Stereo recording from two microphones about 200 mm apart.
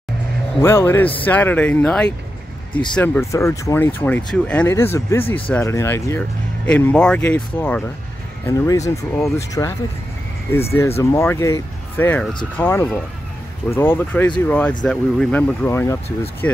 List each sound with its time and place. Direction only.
0.6 s speech: 10° left (ahead or behind)